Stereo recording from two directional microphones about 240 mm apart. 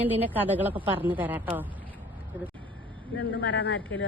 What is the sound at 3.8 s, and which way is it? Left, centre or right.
Speech, centre.